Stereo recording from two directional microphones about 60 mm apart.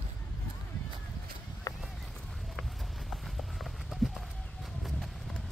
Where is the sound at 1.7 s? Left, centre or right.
Left.